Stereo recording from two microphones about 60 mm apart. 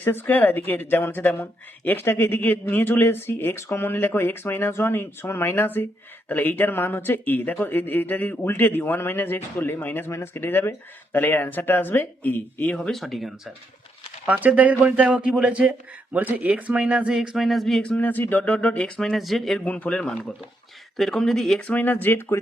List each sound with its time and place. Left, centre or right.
0.0 s speech: left
10.1 s speech: left
10.4 s speech: left
12.9 s a sound: centre
14.3 s a man's voice: right
16.1 s a man's voice: right
17.2 s a sound: centre
17.8 s speech: left
19.1 s a sound: centre
19.5 s speech: left
20.9 s speech: centre
21.6 s speech: left